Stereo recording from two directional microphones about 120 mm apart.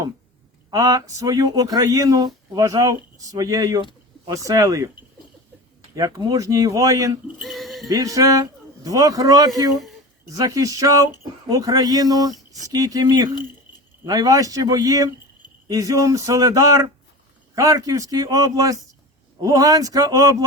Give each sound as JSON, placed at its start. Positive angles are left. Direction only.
{"t": 0.7, "sound": "speech", "side_deg": -30}
{"t": 5.9, "sound": "speech", "side_deg": -30}
{"t": 7.3, "sound": "a sound", "side_deg": 0}
{"t": 7.9, "sound": "speech", "side_deg": -30}